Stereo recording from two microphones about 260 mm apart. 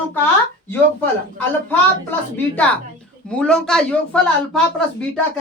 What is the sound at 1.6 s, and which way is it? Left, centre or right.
A woman's voice, centre.